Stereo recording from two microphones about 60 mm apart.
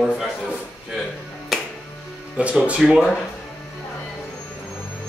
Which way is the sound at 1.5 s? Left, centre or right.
Centre.